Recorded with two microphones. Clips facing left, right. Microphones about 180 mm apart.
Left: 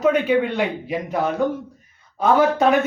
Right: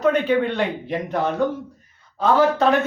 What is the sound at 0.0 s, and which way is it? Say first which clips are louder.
A man's voice: left 1 dB; 5° left (ahead or behind).